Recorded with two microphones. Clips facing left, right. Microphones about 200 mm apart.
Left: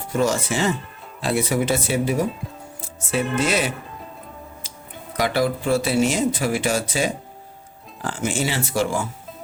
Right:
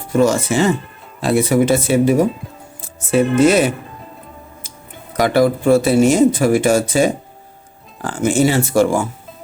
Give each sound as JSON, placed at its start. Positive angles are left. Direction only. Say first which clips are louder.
{"t": 0.2, "sound": "speech", "louder": "right 7 dB", "side_deg": -50}
{"t": 5.1, "sound": "speech", "louder": "right 7 dB", "side_deg": -50}